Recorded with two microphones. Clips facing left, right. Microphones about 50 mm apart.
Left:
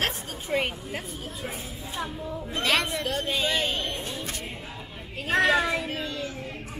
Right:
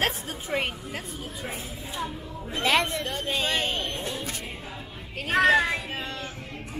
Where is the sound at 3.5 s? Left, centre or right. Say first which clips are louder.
Even; centre.